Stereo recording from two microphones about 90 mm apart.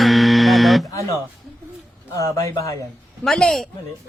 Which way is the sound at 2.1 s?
35° left (ahead or behind).